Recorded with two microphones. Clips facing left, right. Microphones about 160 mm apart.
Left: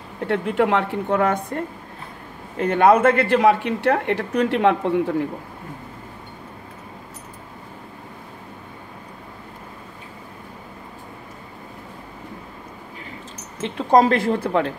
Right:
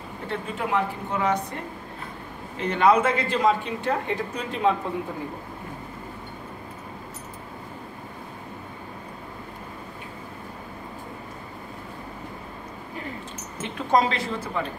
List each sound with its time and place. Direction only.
0.3 s speech: 75° left (ahead or behind); by 1.6 s 50° left (ahead or behind)
2.6 s speech: 50° left (ahead or behind); by 5.1 s 75° left (ahead or behind)
13.6 s a woman's voice: 35° left (ahead or behind)
14.0 s speech: 55° left (ahead or behind)